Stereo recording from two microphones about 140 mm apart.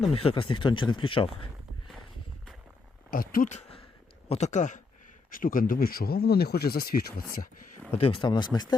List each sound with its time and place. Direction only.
0.1 s speech: 40° left (ahead or behind)
3.1 s speech: 90° left
4.3 s speech: 55° left (ahead or behind)
5.3 s speech: 80° left
7.9 s speech: 45° left (ahead or behind)